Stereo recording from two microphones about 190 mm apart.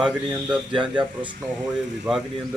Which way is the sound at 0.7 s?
25° right (ahead or behind).